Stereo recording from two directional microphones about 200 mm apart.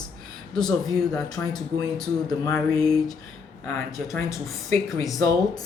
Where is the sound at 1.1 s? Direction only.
20° left (ahead or behind).